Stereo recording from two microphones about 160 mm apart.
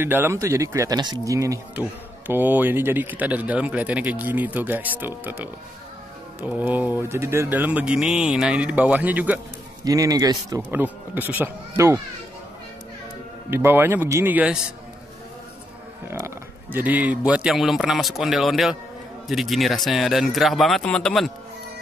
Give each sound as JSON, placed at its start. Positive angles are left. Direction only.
{"t": 0.0, "sound": "speech", "side_deg": -15}
{"t": 9.8, "sound": "speech", "side_deg": -20}
{"t": 10.7, "sound": "speech", "side_deg": -10}
{"t": 13.5, "sound": "speech", "side_deg": -15}
{"t": 16.1, "sound": "speech", "side_deg": -15}